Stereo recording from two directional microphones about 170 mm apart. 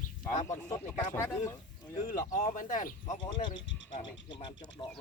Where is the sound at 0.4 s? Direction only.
20° left (ahead or behind).